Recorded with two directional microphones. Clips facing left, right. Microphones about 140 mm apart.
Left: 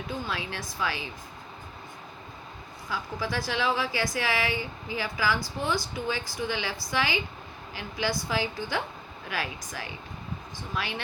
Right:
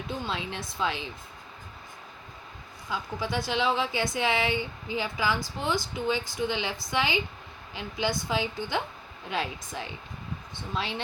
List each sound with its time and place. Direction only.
0.3 s speech: 25° right (ahead or behind)
2.9 s speech: 20° right (ahead or behind)